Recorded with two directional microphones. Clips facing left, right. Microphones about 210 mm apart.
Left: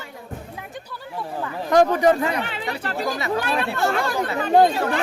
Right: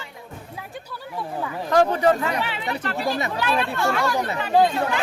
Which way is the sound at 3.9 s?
50° left (ahead or behind).